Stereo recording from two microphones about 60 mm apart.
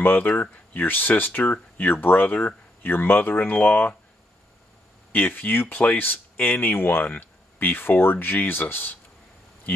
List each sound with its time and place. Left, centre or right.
0.0 s speech: left
5.1 s speech: left